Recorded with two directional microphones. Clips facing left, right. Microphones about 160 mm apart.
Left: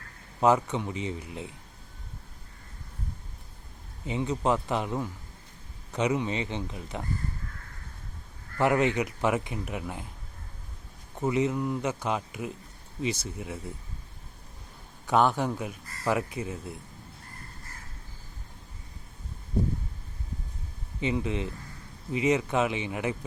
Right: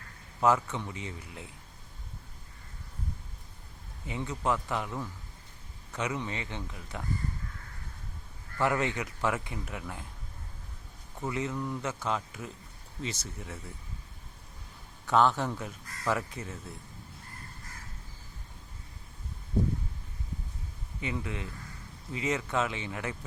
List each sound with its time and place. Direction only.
0.3 s speech: 20° left (ahead or behind)
4.0 s speech: 20° left (ahead or behind)
8.5 s speech: 20° left (ahead or behind)
11.2 s speech: 20° left (ahead or behind)
15.0 s speech: 15° left (ahead or behind)
21.0 s speech: 20° left (ahead or behind)